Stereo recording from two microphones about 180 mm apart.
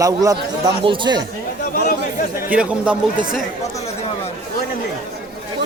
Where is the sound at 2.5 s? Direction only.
5° right (ahead or behind).